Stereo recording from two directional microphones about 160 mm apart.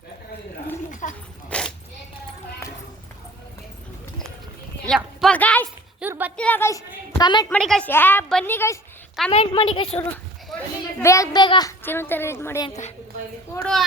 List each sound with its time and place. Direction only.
0.9 s a sound: 50° left (ahead or behind)
1.5 s dog: 5° left (ahead or behind)
2.6 s clip-clop: 15° left (ahead or behind)
4.9 s a sound: centre (ahead or behind)
6.0 s a sound: 10° right (ahead or behind)
6.3 s a woman's voice: 10° left (ahead or behind); by 7.4 s 25° left (ahead or behind)
7.5 s a woman's voice: 5° left (ahead or behind)
9.3 s a woman's voice: 35° left (ahead or behind)
10.5 s children playing: 5° left (ahead or behind)
11.0 s a child's voice: 20° left (ahead or behind)
11.8 s a woman's voice: 15° left (ahead or behind)
13.6 s a woman's voice: 5° left (ahead or behind)